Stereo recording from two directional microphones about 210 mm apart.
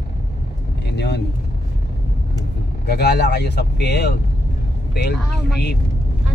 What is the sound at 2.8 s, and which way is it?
Speech, 50° left (ahead or behind).